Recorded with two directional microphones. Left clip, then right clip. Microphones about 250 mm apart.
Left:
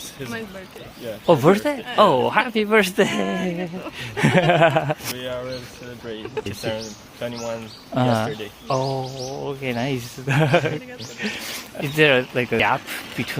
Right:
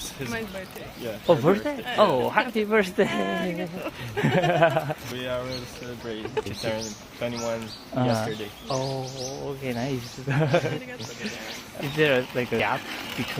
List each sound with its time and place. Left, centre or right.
1.3 s speech: left
3.2 s speech: centre
4.2 s speech: left
6.7 s speech: centre
7.9 s speech: left
11.9 s speech: left